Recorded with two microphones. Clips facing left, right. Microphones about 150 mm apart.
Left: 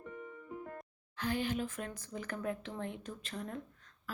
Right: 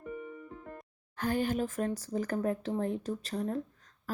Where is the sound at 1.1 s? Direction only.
45° right (ahead or behind).